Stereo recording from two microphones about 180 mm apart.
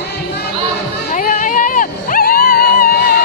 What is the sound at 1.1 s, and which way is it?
Dog, 45° left (ahead or behind).